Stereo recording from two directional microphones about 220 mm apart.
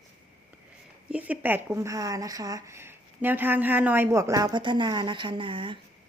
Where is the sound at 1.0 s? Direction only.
5° right (ahead or behind); by 5.8 s 20° right (ahead or behind).